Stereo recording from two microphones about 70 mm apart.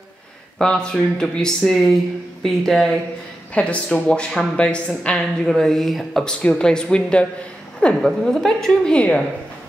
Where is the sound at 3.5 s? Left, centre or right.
Centre.